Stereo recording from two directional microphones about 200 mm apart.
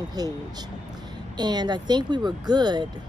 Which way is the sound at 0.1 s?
20° right (ahead or behind).